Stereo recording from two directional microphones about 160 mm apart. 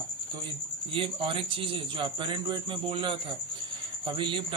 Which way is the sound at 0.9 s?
35° right (ahead or behind).